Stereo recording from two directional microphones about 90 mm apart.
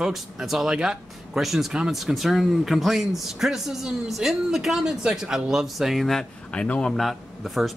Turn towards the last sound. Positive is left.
turn(degrees=0)  # may be behind; listen again after turning